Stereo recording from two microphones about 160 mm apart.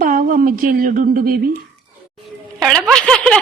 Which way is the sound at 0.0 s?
55° right (ahead or behind).